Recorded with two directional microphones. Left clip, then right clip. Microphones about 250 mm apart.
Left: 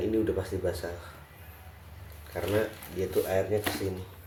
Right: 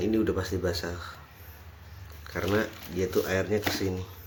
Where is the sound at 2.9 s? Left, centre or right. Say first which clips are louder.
Right 1 dB; right.